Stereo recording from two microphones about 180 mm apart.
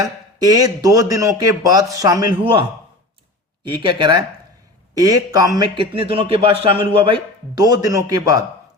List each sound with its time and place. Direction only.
0.3 s a man's voice: 20° right (ahead or behind)